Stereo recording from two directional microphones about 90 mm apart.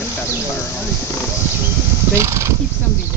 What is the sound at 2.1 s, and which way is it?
Speech, 35° right (ahead or behind).